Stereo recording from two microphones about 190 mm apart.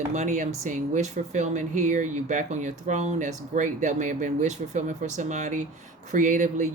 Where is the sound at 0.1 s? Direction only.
40° right (ahead or behind).